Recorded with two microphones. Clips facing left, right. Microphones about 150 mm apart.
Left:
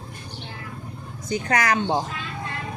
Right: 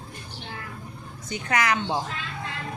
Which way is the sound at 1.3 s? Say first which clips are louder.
Left 3 dB; 35° left (ahead or behind).